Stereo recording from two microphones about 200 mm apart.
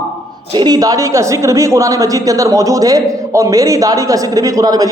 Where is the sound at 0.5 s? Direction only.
20° right (ahead or behind).